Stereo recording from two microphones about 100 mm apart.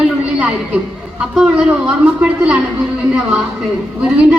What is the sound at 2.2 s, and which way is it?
Speech, 15° right (ahead or behind).